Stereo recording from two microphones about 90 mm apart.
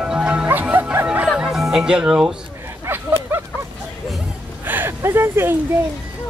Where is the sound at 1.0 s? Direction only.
10° right (ahead or behind).